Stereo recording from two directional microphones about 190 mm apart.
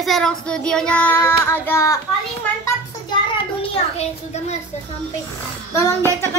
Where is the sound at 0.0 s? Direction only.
Centre (ahead or behind).